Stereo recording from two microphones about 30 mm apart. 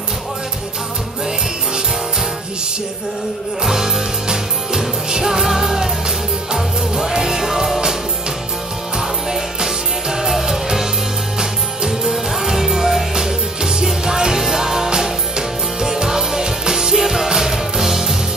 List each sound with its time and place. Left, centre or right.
3.6 s music: centre
9.6 s music: centre
11.9 s music: centre